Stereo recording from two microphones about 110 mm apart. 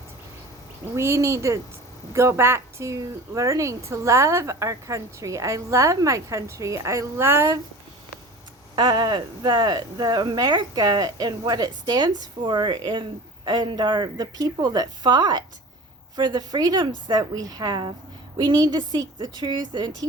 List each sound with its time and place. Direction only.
0.9 s a woman's voice: 25° right (ahead or behind)
8.7 s speech: 40° right (ahead or behind)